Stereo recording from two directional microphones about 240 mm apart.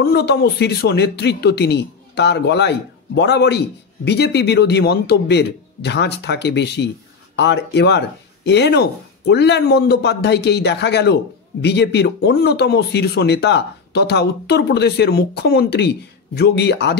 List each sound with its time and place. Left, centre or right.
0.0 s speech: left